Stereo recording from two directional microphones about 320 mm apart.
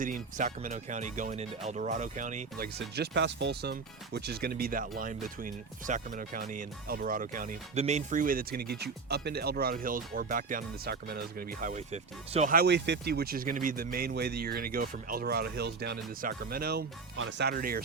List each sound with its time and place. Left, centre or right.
0.0 s speech: right